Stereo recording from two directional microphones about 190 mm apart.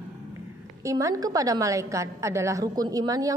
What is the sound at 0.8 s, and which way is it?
A woman's voice, 15° right (ahead or behind).